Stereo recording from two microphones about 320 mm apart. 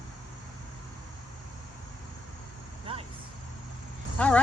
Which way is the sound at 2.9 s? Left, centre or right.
Centre.